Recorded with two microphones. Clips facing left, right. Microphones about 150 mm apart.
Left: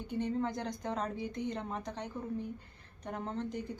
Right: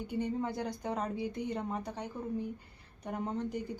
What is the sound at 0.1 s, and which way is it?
A woman's voice, 10° right (ahead or behind).